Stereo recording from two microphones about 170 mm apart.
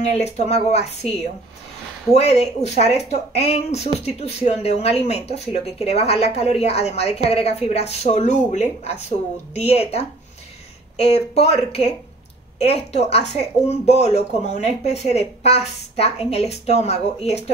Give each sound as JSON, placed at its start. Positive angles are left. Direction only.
{"t": 0.0, "sound": "speech", "side_deg": 40}